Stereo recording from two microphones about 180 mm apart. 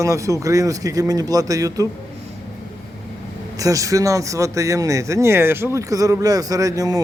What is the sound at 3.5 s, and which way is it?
A man's voice, 20° right (ahead or behind).